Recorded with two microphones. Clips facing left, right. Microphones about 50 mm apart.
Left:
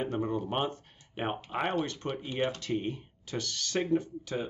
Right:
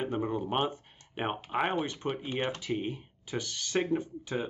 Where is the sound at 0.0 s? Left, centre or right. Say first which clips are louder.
Even; centre.